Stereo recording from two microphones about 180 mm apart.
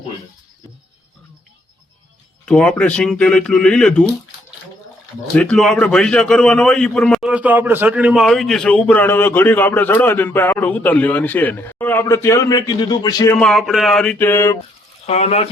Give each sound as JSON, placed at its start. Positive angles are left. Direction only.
{"t": 2.5, "sound": "speech", "side_deg": 5}
{"t": 5.3, "sound": "a man's voice", "side_deg": 5}
{"t": 13.4, "sound": "speech", "side_deg": 0}
{"t": 15.0, "sound": "speech", "side_deg": 35}